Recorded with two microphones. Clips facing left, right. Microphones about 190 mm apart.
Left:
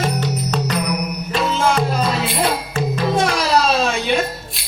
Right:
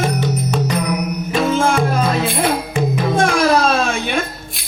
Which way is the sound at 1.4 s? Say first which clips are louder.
Right 2 dB; 50° right (ahead or behind).